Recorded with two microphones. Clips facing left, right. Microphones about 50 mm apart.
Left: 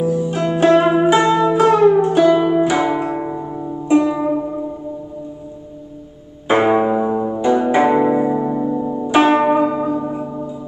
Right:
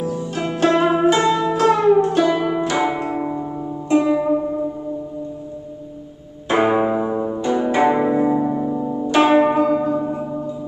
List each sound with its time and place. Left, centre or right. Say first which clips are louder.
0.0 s music: left 5 dB; centre
2.9 s zither: left 2 dB; centre
6.6 s music: left 1 dB; centre
9.2 s zither: even; centre
10.0 s music: even; centre